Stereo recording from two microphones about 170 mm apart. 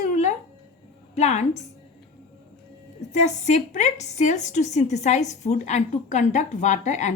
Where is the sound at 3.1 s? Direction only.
45° left (ahead or behind).